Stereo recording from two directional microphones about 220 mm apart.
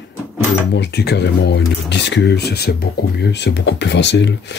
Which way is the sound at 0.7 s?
50° left (ahead or behind).